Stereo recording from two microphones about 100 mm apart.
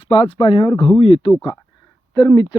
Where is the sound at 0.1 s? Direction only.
65° left (ahead or behind).